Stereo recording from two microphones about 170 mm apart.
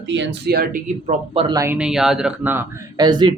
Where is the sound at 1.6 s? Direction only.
10° right (ahead or behind).